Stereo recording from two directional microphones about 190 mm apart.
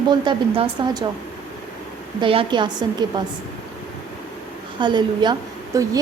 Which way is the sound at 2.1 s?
25° right (ahead or behind).